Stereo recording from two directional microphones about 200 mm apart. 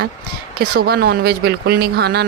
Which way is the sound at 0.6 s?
50° right (ahead or behind).